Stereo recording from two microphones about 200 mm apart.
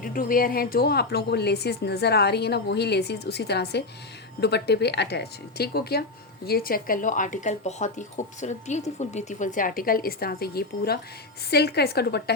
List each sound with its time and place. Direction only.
0.0 s speech: 45° left (ahead or behind)